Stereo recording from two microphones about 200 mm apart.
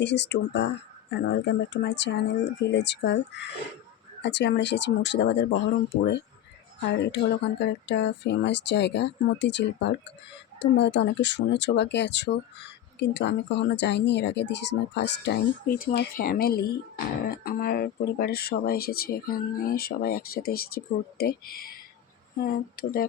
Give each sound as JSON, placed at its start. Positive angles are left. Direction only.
{"t": 0.0, "sound": "speech", "side_deg": 60}
{"t": 6.9, "sound": "speech", "side_deg": 60}